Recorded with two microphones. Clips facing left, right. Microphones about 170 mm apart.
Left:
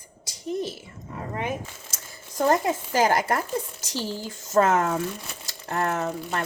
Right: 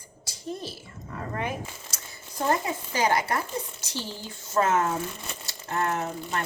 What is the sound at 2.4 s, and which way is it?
Speech, 45° left (ahead or behind).